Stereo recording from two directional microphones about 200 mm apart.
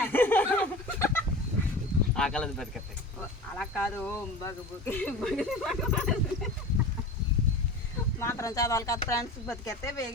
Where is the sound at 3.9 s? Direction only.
10° left (ahead or behind).